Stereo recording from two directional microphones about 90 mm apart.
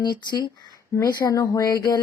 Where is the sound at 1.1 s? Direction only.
45° left (ahead or behind).